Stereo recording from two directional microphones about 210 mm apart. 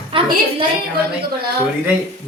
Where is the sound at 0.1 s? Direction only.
25° right (ahead or behind).